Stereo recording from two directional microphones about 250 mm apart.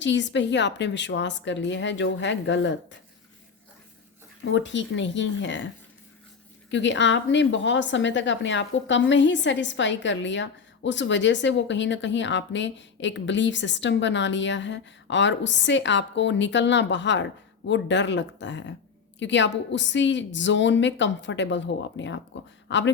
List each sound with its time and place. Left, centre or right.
0.0 s a woman's voice: left
4.4 s a woman's voice: left
6.7 s a woman's voice: left